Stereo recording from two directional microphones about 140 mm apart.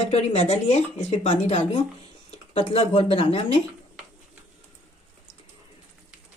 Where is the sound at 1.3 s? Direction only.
45° left (ahead or behind).